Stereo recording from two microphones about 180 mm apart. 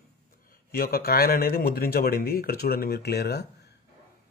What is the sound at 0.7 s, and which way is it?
Speech, 60° left (ahead or behind).